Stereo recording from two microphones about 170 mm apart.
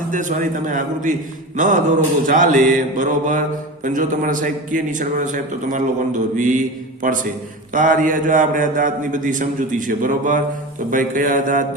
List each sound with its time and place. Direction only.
0.1 s a man's voice: 50° right (ahead or behind)